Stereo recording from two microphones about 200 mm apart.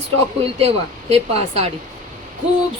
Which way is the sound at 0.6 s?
30° right (ahead or behind).